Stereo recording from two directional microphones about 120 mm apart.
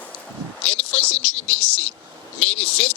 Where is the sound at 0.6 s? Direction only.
10° left (ahead or behind).